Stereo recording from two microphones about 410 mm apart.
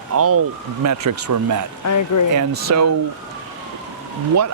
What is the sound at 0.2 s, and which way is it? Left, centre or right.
Speech, right.